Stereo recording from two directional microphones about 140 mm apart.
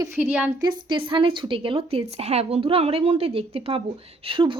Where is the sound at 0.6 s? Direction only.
35° right (ahead or behind).